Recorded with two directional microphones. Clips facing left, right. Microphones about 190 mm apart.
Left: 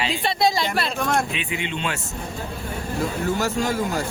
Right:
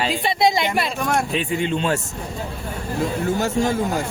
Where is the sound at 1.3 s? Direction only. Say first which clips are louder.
Right 7 dB; 40° right (ahead or behind).